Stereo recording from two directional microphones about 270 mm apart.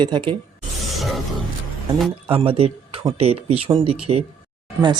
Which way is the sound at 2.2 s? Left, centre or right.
Centre.